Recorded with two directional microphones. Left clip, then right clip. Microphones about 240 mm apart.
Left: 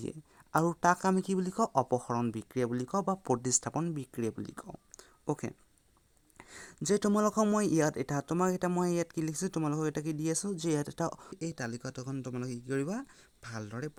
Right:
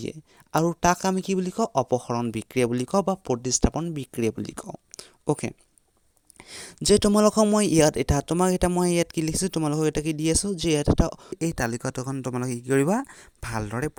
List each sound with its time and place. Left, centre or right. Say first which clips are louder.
0.0 s speech: right 7 dB; right
6.7 s speech: right 10 dB; right
11.3 s speech: right 11 dB; right